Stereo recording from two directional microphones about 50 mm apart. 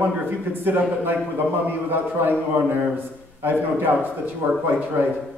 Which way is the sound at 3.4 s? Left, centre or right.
Right.